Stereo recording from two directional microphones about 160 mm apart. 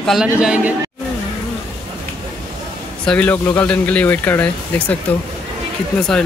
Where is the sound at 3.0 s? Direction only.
10° left (ahead or behind).